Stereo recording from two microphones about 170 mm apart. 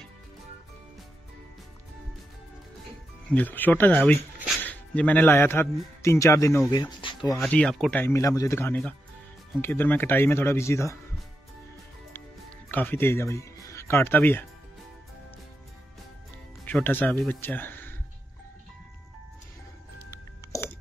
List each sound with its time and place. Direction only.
3.3 s speech: 10° left (ahead or behind)
6.7 s speech: 30° left (ahead or behind)
7.3 s speech: 5° left (ahead or behind)
12.7 s speech: 10° left (ahead or behind)
16.6 s speech: 10° left (ahead or behind)
20.1 s music: 15° left (ahead or behind)